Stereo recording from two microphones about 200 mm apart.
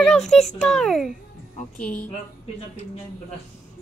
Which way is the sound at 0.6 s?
Centre (ahead or behind).